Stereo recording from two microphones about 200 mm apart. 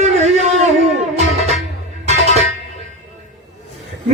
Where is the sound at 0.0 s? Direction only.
35° right (ahead or behind).